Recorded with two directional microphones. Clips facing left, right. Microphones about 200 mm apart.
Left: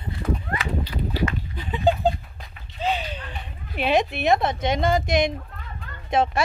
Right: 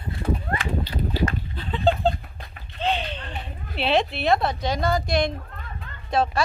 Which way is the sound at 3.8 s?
15° left (ahead or behind).